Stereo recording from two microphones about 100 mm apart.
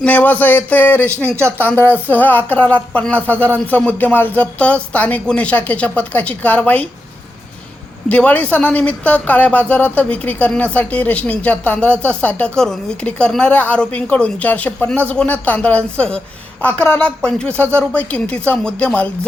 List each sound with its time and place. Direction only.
0.0 s speech: 15° left (ahead or behind)
1.1 s speech: 25° right (ahead or behind)
1.6 s a sound: 20° left (ahead or behind)
2.0 s speech: 15° left (ahead or behind)
8.1 s speech: 15° left (ahead or behind)